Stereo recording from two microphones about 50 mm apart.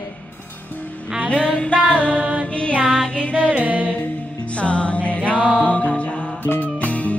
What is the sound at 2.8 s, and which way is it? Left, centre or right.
Music, centre.